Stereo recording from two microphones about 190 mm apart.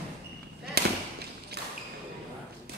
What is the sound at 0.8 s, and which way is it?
Fireworks, 55° right (ahead or behind).